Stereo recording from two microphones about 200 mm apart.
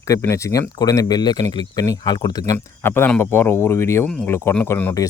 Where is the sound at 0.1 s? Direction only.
15° left (ahead or behind).